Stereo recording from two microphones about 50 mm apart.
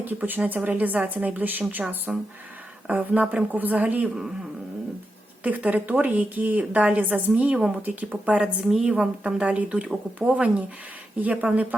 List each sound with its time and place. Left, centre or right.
0.0 s a woman's voice: right
2.1 s speech: centre
2.9 s a woman's voice: right
5.4 s a woman's voice: right
8.8 s speech: right
11.2 s a woman's voice: right